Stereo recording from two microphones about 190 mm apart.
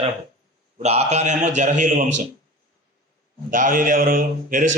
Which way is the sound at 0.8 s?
35° right (ahead or behind).